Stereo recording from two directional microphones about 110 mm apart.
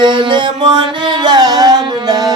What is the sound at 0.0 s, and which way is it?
Music, 45° right (ahead or behind).